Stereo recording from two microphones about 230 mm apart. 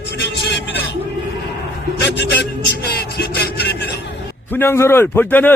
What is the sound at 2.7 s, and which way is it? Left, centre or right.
Music, left.